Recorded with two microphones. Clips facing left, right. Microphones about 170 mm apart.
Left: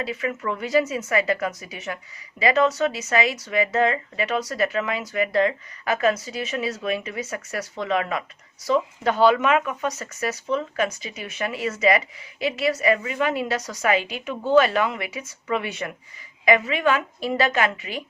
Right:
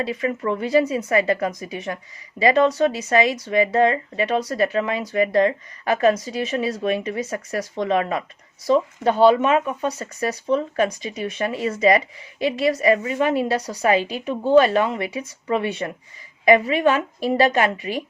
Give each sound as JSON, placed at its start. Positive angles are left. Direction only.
{"t": 0.0, "sound": "speech", "side_deg": -35}